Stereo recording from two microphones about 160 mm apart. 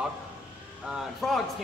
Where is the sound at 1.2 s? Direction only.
Centre (ahead or behind).